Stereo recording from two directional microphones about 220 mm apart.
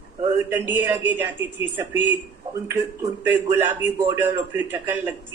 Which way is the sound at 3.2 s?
10° right (ahead or behind).